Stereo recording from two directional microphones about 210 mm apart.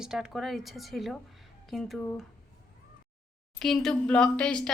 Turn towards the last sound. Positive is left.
turn(degrees=5)  # may be behind; listen again after turning